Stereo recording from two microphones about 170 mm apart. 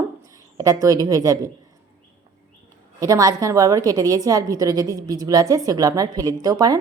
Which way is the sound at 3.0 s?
20° right (ahead or behind).